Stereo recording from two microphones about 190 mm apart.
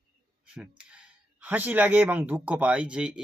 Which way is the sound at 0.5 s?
5° right (ahead or behind).